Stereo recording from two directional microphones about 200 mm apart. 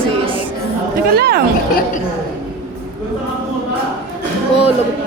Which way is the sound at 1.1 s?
50° right (ahead or behind).